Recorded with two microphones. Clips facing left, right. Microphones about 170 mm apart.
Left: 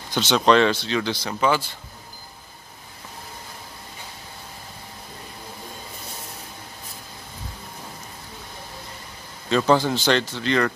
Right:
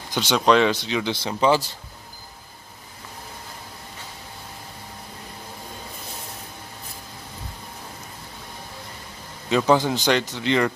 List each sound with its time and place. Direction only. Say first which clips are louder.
0.1 s speech: left 1 dB; 10° right (ahead or behind)
1.1 s speech: right 5 dB; 25° right (ahead or behind)
9.5 s speech: even; 15° right (ahead or behind)